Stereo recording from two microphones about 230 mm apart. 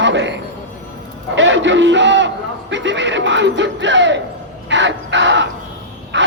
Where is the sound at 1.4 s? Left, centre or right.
Right.